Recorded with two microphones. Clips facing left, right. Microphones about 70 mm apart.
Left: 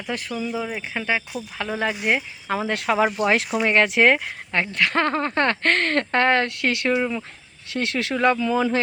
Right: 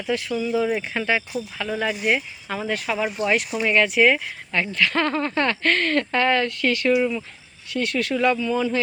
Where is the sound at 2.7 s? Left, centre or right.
Left.